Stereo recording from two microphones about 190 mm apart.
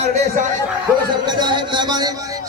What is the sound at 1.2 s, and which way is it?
Speech, 25° right (ahead or behind).